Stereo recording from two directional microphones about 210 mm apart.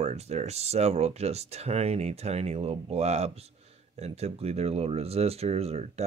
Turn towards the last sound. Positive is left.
turn(degrees=-30)  # may be behind; listen again after turning